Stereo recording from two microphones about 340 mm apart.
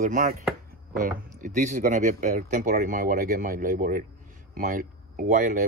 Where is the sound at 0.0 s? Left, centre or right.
Right.